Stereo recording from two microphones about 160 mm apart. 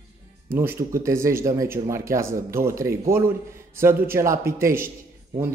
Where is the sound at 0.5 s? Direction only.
15° right (ahead or behind).